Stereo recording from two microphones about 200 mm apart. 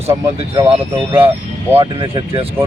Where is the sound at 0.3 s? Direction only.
30° right (ahead or behind).